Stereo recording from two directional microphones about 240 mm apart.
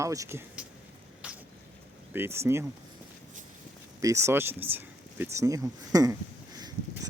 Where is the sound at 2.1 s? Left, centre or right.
Centre.